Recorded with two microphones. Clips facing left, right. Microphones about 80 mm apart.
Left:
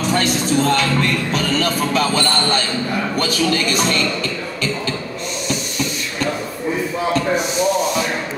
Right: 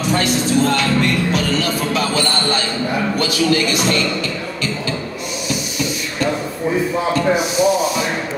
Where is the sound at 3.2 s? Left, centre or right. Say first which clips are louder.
Right 2 dB; left.